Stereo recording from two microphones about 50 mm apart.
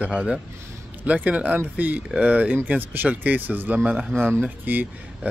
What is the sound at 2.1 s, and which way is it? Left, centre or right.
Speech, right.